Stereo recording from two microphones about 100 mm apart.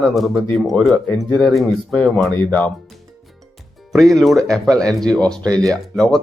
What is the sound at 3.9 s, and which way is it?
Speech, centre (ahead or behind).